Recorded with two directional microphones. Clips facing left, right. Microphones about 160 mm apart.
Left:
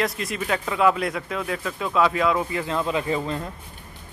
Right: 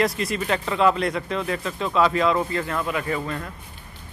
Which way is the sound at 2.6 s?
20° left (ahead or behind).